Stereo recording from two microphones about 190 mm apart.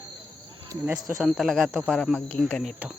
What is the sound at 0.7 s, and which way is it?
Speech, 10° right (ahead or behind).